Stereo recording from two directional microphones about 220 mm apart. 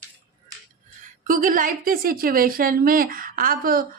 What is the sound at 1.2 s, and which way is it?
Speech, 40° right (ahead or behind).